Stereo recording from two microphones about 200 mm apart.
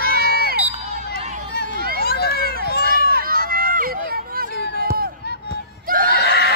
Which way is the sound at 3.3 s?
45° right (ahead or behind).